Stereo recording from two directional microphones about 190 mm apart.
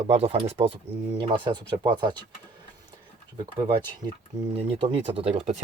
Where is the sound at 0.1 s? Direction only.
30° right (ahead or behind).